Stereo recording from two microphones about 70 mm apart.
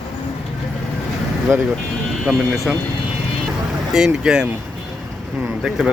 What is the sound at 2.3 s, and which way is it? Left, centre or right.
Speech, right.